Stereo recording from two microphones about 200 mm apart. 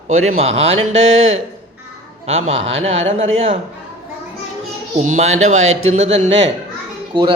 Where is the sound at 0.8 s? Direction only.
80° right.